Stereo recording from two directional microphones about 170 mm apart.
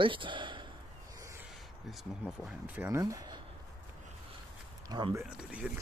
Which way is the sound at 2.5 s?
15° right (ahead or behind).